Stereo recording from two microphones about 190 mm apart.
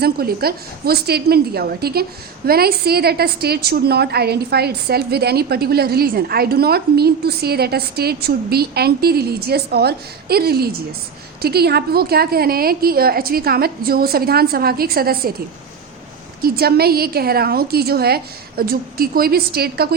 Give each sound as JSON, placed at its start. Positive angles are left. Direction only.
{"t": 0.0, "sound": "a woman's voice", "side_deg": -55}
{"t": 16.4, "sound": "a woman's voice", "side_deg": -55}